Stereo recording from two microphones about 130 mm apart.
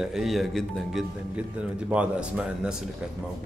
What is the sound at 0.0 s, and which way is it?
Speech, 5° right (ahead or behind).